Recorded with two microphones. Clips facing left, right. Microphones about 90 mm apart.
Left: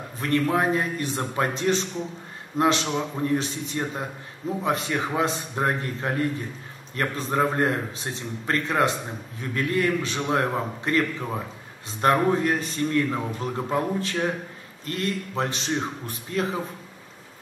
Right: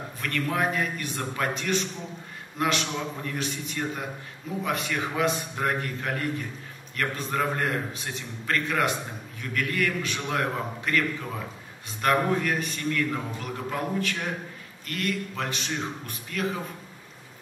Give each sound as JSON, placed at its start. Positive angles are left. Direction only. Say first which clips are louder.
{"t": 0.2, "sound": "a man's voice", "louder": "left 5 dB", "side_deg": 30}